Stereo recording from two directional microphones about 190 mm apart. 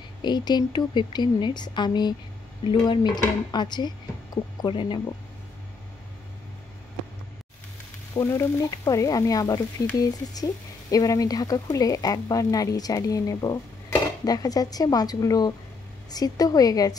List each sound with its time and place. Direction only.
0.2 s frying: 20° left (ahead or behind)
8.1 s frying: 15° left (ahead or behind)